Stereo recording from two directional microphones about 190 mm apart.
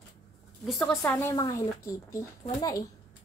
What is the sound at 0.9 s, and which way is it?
A woman's voice, 15° left (ahead or behind).